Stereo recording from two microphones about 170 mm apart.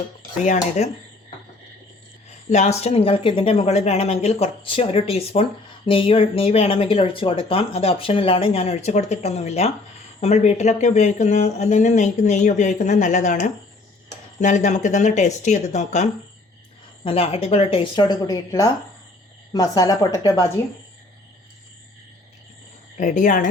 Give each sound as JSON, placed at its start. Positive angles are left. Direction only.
{"t": 0.4, "sound": "speech", "side_deg": 45}
{"t": 2.5, "sound": "speech", "side_deg": 40}
{"t": 23.0, "sound": "speech", "side_deg": 45}